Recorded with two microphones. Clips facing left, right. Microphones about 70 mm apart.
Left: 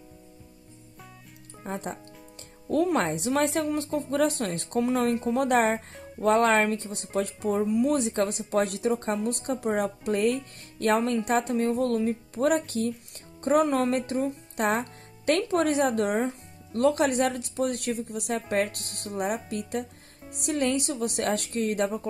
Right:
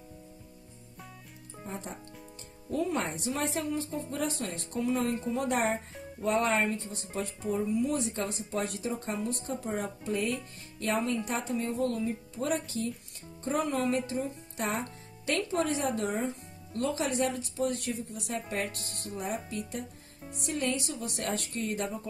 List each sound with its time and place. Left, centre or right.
1.6 s speech: left
2.7 s a woman's voice: left
8.0 s a woman's voice: left